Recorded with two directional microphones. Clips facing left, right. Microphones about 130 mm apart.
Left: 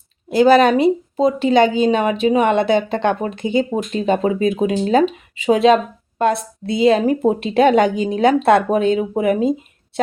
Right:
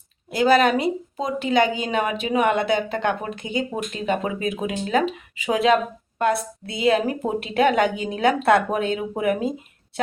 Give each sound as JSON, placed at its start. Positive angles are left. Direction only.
{"t": 0.3, "sound": "a woman's voice", "side_deg": 25}